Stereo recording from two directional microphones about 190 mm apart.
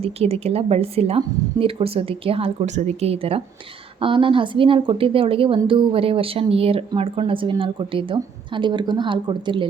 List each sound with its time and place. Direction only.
0.0 s a woman's voice: 30° right (ahead or behind)